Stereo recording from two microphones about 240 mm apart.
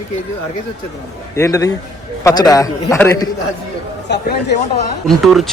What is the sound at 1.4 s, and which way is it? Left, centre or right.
A man's voice, centre.